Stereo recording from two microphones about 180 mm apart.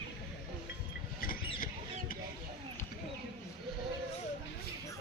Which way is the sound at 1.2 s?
55° left (ahead or behind).